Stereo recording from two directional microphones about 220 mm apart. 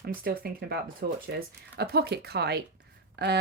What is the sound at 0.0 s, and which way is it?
Speech, 40° right (ahead or behind).